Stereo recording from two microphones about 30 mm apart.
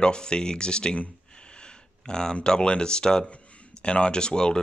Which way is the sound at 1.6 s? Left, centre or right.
Left.